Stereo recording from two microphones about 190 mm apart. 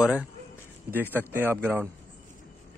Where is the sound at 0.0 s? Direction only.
5° right (ahead or behind).